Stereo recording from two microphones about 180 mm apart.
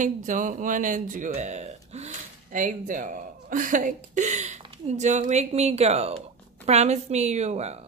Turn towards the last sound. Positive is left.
turn(degrees=-35)  # may be behind; listen again after turning